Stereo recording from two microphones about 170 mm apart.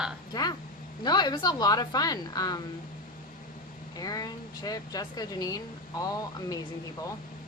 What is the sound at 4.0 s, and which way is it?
Speech, 20° left (ahead or behind).